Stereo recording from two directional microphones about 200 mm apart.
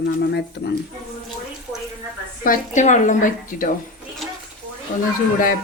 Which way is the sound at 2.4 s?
40° left (ahead or behind).